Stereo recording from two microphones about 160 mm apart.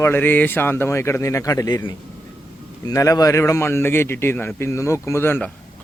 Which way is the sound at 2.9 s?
20° left (ahead or behind).